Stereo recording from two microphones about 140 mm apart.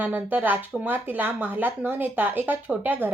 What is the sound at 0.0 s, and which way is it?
A woman's voice, 10° right (ahead or behind).